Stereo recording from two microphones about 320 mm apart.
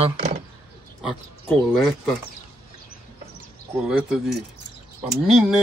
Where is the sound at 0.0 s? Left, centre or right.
Right.